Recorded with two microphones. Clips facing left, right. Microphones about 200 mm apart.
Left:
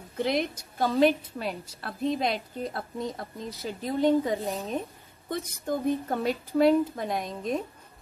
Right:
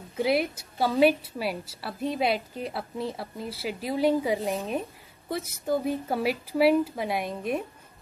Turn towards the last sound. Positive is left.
turn(degrees=-10)  # may be behind; listen again after turning